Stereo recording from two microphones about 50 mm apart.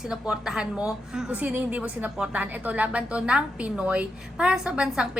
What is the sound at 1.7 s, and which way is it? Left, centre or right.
A woman's voice, right.